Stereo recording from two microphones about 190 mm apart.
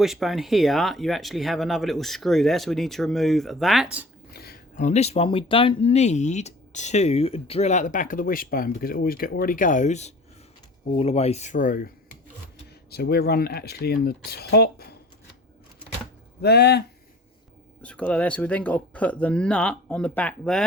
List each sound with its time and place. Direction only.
0.0 s speech: centre (ahead or behind)
4.4 s a sound: 55° left (ahead or behind)
4.9 s speech: 35° left (ahead or behind)
12.9 s speech: 55° left (ahead or behind)
16.4 s speech: 60° left (ahead or behind)
17.8 s speech: 5° left (ahead or behind)